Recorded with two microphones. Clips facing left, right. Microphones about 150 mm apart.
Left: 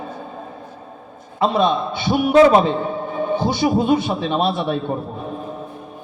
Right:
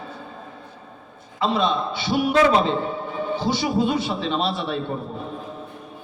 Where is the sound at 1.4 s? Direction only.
50° left (ahead or behind).